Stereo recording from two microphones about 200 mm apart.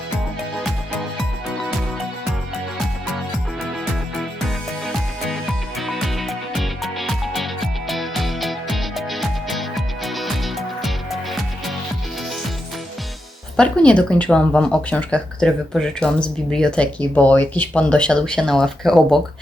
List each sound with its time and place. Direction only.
4.4 s music: centre (ahead or behind)
13.6 s speech: 5° left (ahead or behind)